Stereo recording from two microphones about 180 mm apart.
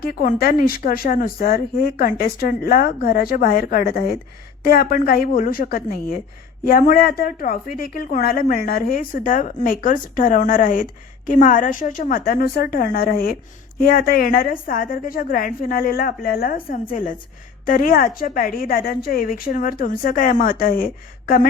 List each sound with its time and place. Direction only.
0.0 s a woman's voice: 55° left (ahead or behind)